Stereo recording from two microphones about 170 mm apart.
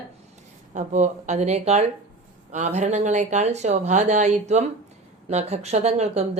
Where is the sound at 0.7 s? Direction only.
45° right (ahead or behind).